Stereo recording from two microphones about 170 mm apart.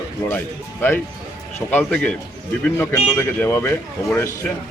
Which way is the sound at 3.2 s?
10° left (ahead or behind).